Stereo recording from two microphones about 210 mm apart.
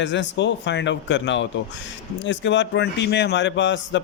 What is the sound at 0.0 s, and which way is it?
A man's voice, 60° left (ahead or behind).